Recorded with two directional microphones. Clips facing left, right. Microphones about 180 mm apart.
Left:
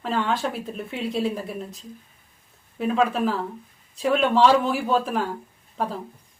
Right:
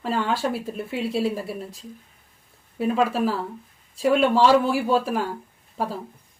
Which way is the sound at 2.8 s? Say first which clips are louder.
Even; 5° right (ahead or behind).